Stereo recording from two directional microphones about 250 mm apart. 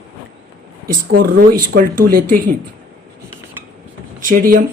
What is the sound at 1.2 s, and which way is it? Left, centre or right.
Speech, right.